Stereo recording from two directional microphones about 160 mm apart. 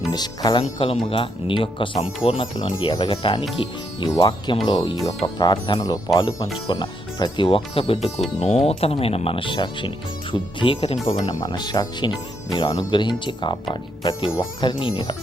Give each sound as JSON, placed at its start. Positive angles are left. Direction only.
{"t": 0.1, "sound": "speech", "side_deg": 25}
{"t": 0.6, "sound": "speech", "side_deg": 35}
{"t": 11.1, "sound": "speech", "side_deg": 25}